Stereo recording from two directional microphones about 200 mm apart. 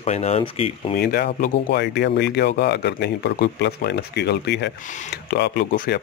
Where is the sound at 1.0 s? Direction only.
50° left (ahead or behind).